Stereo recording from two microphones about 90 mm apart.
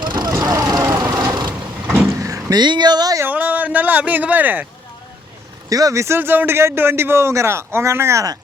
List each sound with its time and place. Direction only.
0.0 s vehicle: 55° right (ahead or behind)
0.4 s vehicle: 40° right (ahead or behind)
0.9 s sewing machine: 45° right (ahead or behind)
2.0 s vehicle: 35° right (ahead or behind)
2.6 s speech: 55° right (ahead or behind)
3.2 s a sound: 20° right (ahead or behind)
5.6 s speech: 40° right (ahead or behind)
6.1 s a man's voice: 25° right (ahead or behind)